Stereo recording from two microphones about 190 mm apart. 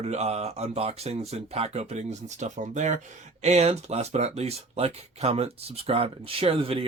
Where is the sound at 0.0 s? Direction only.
35° right (ahead or behind).